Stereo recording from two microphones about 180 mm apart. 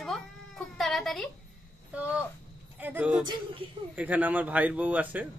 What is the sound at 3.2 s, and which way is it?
Speech, 25° right (ahead or behind).